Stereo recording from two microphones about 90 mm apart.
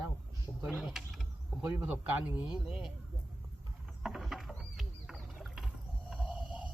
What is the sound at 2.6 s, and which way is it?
Speech, 5° right (ahead or behind).